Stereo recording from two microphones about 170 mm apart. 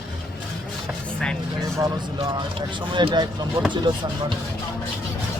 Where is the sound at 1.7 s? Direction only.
25° right (ahead or behind).